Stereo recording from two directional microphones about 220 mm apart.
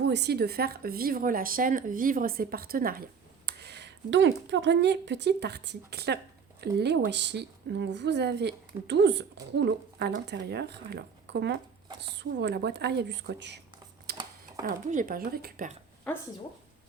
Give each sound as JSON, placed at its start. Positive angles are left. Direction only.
{"t": 0.0, "sound": "speech", "side_deg": -50}
{"t": 14.1, "sound": "a sound", "side_deg": -45}
{"t": 14.6, "sound": "speech", "side_deg": -35}
{"t": 16.1, "sound": "speech", "side_deg": 5}